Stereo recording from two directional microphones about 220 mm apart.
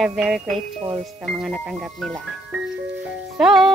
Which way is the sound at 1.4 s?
Centre (ahead or behind).